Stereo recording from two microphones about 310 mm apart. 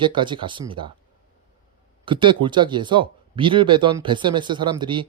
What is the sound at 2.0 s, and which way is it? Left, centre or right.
Speech, centre.